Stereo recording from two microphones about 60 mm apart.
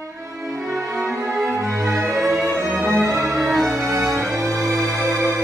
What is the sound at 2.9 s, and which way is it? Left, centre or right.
Music, right.